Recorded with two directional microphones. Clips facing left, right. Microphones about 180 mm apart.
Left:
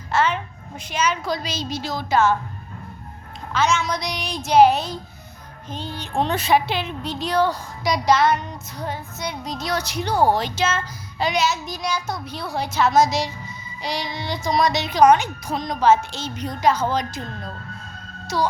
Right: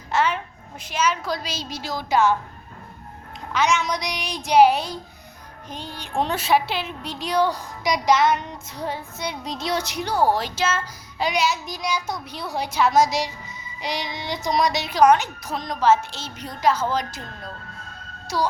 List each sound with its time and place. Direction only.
0.1 s a woman's voice: 15° right (ahead or behind)
0.9 s a woman's voice: 5° right (ahead or behind)
3.5 s a woman's voice: 15° right (ahead or behind)
10.3 s a woman's voice: 5° right (ahead or behind)
18.3 s a woman's voice: 10° right (ahead or behind)